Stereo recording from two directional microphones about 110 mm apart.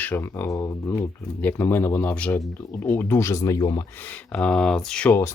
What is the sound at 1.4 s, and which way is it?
Speech, 20° left (ahead or behind).